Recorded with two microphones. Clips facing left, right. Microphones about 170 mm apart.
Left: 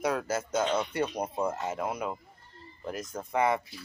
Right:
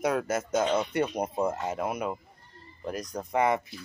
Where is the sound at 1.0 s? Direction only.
10° right (ahead or behind).